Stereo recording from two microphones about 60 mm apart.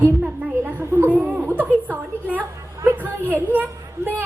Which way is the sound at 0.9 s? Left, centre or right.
Right.